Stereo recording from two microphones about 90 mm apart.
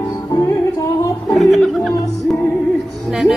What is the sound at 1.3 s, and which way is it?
Speech, centre (ahead or behind).